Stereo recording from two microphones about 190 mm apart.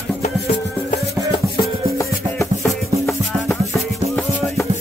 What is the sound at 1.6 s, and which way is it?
Music, 15° left (ahead or behind).